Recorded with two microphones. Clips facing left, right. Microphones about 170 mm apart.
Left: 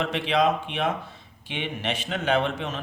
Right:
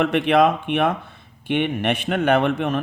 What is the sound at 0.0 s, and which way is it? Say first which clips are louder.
A man's voice: right 6 dB; 55° right (ahead or behind).